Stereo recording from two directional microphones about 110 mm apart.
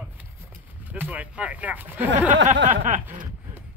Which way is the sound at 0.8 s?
15° right (ahead or behind).